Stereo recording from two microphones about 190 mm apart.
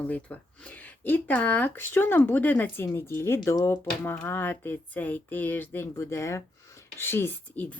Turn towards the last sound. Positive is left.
turn(degrees=10)  # may be behind; listen again after turning